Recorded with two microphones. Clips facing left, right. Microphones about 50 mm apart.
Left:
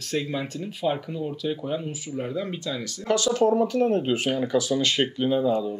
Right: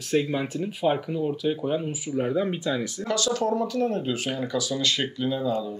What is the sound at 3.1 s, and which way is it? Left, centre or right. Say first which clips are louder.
Speech: left 4 dB; left.